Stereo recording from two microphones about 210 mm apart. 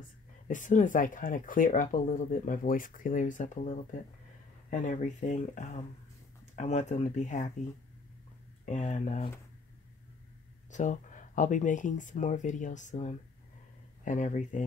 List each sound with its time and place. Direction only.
0.5 s speech: 35° left (ahead or behind)
8.6 s speech: 35° left (ahead or behind)
10.7 s speech: 35° left (ahead or behind)